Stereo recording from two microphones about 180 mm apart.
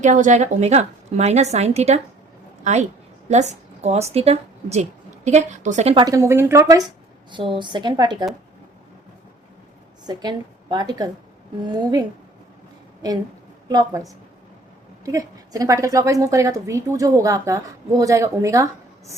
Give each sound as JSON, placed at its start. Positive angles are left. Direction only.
{"t": 0.0, "sound": "a woman's voice", "side_deg": -45}
{"t": 3.2, "sound": "a woman's voice", "side_deg": -40}
{"t": 6.1, "sound": "a woman's voice", "side_deg": -15}
{"t": 10.1, "sound": "a woman's voice", "side_deg": -25}
{"t": 13.7, "sound": "a woman's voice", "side_deg": -20}
{"t": 15.0, "sound": "a woman's voice", "side_deg": -20}